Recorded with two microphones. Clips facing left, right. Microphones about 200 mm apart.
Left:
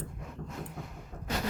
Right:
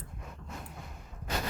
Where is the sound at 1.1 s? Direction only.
55° left (ahead or behind).